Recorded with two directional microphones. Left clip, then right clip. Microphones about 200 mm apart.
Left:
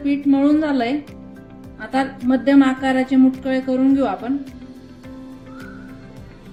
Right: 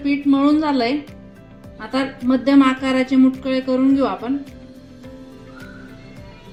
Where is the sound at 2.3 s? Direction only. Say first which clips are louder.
Right 1 dB; 35° right (ahead or behind).